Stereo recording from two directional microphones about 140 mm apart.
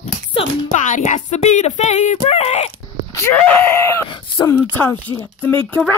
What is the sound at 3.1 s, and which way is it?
Speech, 15° left (ahead or behind).